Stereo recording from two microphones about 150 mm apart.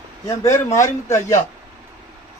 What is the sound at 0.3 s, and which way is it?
Speech, 20° left (ahead or behind).